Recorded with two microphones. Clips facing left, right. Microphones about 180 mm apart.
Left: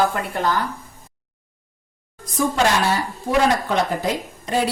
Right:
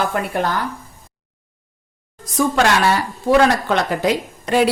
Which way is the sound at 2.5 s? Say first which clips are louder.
Right 3 dB; 75° right (ahead or behind).